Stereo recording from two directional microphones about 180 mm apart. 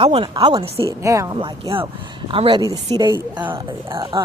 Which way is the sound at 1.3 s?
30° right (ahead or behind).